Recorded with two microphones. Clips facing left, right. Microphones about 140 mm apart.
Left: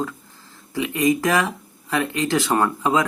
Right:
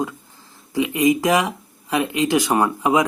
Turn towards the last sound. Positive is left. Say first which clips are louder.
# right 2 dB
turn(degrees=-15)  # may be behind; listen again after turning